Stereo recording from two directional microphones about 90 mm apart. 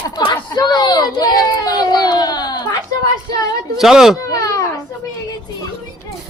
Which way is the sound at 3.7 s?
5° right (ahead or behind).